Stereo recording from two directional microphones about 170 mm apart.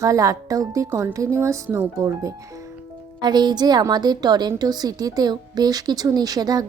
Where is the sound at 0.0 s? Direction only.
20° right (ahead or behind).